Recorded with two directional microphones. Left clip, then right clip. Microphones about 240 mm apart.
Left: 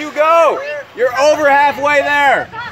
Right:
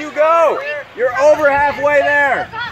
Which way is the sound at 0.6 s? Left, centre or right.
Centre.